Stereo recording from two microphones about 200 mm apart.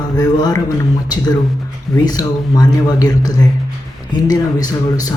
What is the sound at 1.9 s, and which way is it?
Speech, 20° left (ahead or behind).